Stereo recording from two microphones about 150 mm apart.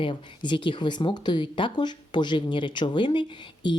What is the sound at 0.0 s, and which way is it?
Speech, 35° left (ahead or behind).